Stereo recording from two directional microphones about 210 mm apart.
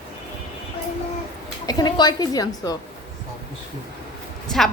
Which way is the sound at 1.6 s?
20° left (ahead or behind).